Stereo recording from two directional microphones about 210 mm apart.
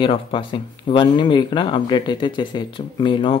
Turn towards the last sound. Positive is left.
turn(degrees=25)  # may be behind; listen again after turning